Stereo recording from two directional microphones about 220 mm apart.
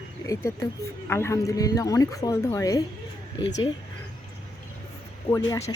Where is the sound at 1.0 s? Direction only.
10° left (ahead or behind).